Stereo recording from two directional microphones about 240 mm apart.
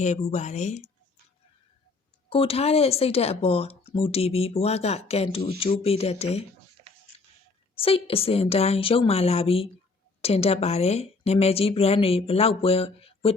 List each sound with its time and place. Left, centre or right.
0.0 s speech: left
2.3 s speech: left
7.8 s speech: left